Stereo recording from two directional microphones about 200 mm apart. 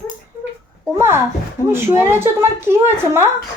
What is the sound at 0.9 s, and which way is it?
A woman's voice, 10° right (ahead or behind).